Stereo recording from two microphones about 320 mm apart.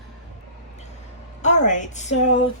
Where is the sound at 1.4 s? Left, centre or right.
Left.